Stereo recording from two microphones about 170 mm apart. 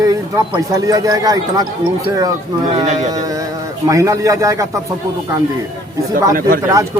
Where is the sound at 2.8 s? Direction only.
45° right (ahead or behind).